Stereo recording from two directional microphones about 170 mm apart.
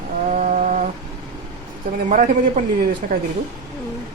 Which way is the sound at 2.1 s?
55° right (ahead or behind).